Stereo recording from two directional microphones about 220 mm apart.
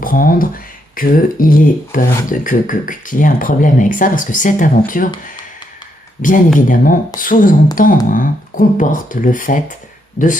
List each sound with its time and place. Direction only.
0.0 s speech: 40° left (ahead or behind)
6.2 s speech: 35° left (ahead or behind)